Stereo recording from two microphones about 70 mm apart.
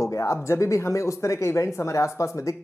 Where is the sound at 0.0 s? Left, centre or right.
Left.